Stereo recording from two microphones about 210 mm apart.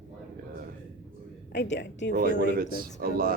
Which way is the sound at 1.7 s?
55° left (ahead or behind).